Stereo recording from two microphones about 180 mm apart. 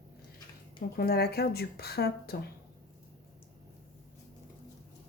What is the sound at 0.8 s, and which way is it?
Speech, 60° left (ahead or behind).